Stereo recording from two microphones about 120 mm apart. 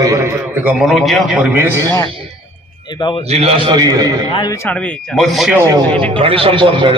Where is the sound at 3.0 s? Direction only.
40° left (ahead or behind).